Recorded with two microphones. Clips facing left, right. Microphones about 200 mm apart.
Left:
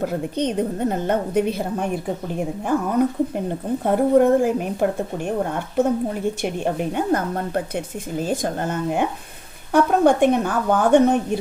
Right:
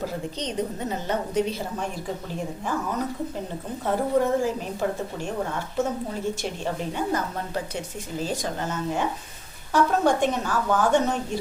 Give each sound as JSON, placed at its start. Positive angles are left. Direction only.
{"t": 0.0, "sound": "a woman's voice", "side_deg": 55}